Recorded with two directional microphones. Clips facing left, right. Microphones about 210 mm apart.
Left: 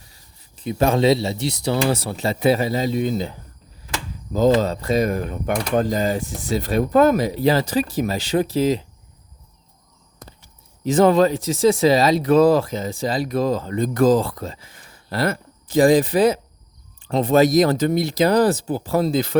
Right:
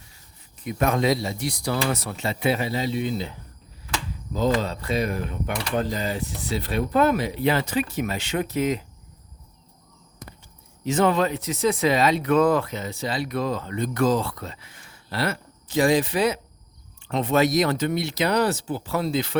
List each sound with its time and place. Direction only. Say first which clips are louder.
0.6 s speech: left 5 dB; 30° left (ahead or behind)
10.8 s speech: left 6 dB; 35° left (ahead or behind)